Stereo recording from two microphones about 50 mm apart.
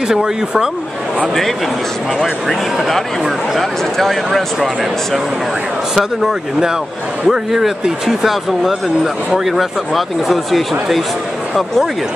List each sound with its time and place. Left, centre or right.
0.1 s speech: centre
2.4 s speech: centre
5.9 s speech: centre